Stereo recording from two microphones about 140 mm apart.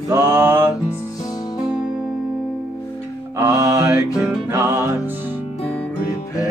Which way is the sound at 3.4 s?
25° right (ahead or behind).